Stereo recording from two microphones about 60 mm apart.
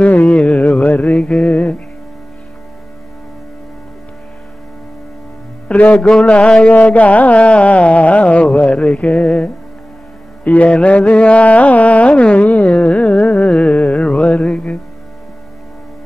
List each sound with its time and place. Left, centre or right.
0.0 s carnatic music: left
0.4 s a sound: left
0.7 s music: left
5.7 s a man's voice: left
5.9 s mantra: centre
6.3 s carnatic music: left